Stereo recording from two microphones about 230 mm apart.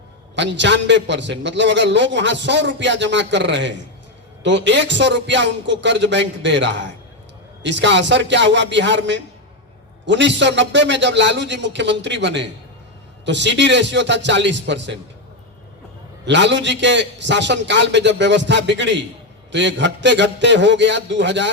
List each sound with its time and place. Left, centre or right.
0.3 s a man's voice: right
16.2 s a man's voice: right